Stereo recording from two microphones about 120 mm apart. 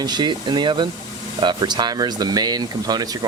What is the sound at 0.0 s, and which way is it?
Speech, 40° right (ahead or behind).